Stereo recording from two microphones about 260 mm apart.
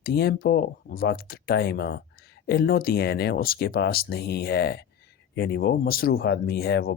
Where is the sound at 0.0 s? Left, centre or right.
Left.